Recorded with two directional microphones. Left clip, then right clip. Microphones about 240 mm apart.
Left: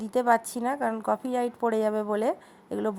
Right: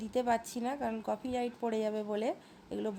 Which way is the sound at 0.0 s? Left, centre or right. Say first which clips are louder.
Left 8 dB; left.